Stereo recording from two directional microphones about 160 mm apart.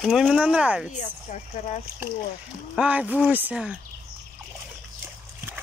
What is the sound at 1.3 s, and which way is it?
Speech, 50° left (ahead or behind).